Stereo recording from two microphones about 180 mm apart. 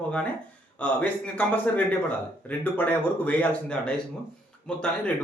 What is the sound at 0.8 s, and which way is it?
Speech, 5° left (ahead or behind).